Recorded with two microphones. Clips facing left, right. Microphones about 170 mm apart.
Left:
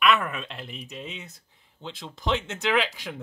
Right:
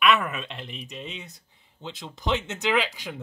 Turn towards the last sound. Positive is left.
turn(degrees=0)  # may be behind; listen again after turning